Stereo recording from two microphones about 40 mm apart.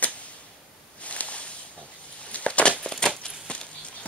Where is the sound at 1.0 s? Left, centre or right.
Left.